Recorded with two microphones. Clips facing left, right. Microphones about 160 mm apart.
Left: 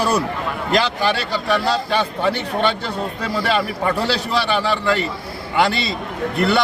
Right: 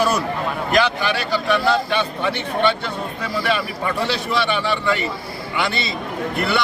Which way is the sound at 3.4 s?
35° left (ahead or behind).